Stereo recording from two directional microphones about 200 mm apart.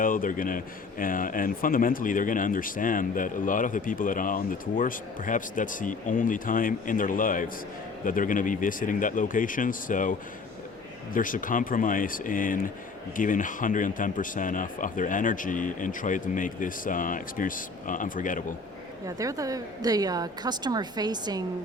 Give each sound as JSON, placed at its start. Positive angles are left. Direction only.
{"t": 0.0, "sound": "speech", "side_deg": 45}
{"t": 19.0, "sound": "a woman's voice", "side_deg": -15}